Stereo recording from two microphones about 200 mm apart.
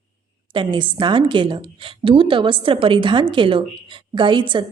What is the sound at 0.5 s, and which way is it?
A woman's voice, 25° right (ahead or behind).